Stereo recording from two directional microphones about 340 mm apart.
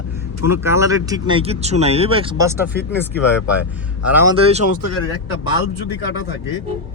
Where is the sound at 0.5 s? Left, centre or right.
Centre.